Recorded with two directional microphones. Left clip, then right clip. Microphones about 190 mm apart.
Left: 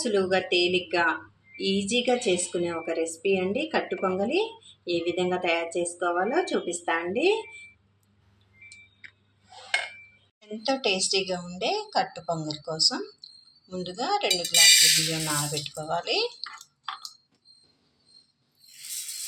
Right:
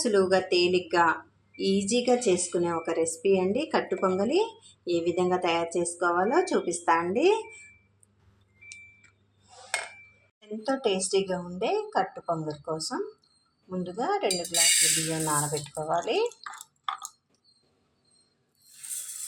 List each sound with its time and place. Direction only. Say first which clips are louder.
0.0 s speech: right 1 dB; 5° right (ahead or behind)
10.4 s speech: left 1 dB; 10° right (ahead or behind)
15.1 s speech: right 1 dB; 5° left (ahead or behind)